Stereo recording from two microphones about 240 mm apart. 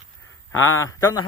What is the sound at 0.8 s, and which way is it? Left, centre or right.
Speech, centre.